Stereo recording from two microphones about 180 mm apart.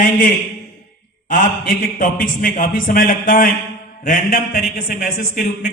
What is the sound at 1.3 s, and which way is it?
A man's voice, 50° left (ahead or behind).